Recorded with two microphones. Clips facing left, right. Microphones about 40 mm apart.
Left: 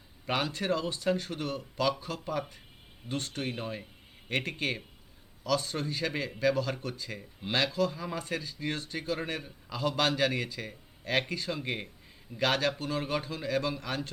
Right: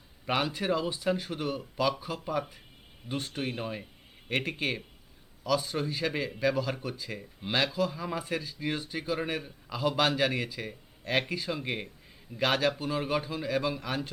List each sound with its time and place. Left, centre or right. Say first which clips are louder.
0.3 s a man's voice: right 1 dB; centre